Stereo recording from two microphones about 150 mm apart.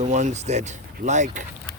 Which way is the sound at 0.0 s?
55° right (ahead or behind).